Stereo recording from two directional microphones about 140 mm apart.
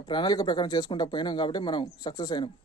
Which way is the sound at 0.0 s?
35° left (ahead or behind).